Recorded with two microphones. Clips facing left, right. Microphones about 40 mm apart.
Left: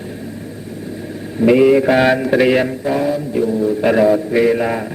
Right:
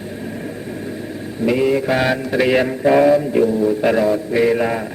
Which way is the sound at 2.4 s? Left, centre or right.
Centre.